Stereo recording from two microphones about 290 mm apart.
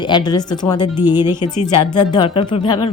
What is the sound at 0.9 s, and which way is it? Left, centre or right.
Speech, centre.